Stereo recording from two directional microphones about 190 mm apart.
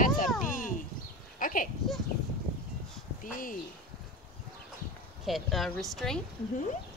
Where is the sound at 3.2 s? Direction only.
45° left (ahead or behind).